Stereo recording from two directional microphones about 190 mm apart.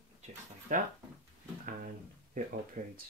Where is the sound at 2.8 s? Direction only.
40° right (ahead or behind).